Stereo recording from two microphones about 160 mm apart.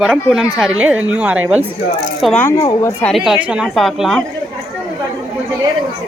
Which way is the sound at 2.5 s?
25° left (ahead or behind).